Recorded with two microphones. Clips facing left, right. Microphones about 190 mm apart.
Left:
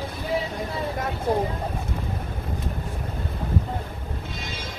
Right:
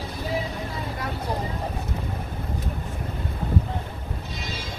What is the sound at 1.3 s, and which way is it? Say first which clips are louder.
Speech: left 8 dB; 50° left (ahead or behind).